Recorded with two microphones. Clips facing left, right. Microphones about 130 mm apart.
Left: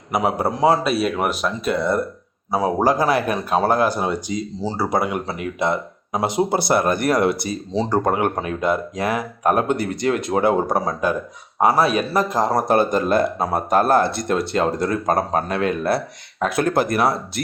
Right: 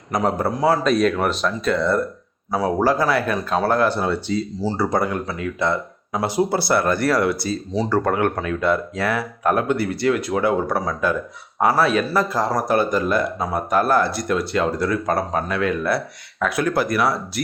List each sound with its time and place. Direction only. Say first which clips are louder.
0.1 s speech: even; 10° left (ahead or behind); by 14.8 s 30° left (ahead or behind)
14.8 s speech: left 1 dB; 45° left (ahead or behind); by 17.4 s 25° left (ahead or behind)